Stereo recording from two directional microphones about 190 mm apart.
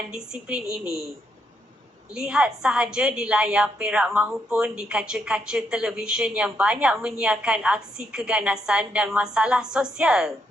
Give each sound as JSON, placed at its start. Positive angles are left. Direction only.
{"t": 0.1, "sound": "a woman's voice", "side_deg": -5}
{"t": 2.1, "sound": "a woman's voice", "side_deg": -5}